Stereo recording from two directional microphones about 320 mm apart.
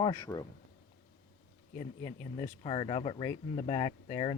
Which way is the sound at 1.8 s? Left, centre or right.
Centre.